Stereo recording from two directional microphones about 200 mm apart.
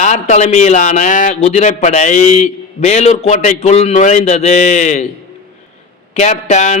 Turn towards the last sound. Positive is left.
turn(degrees=35)  # may be behind; listen again after turning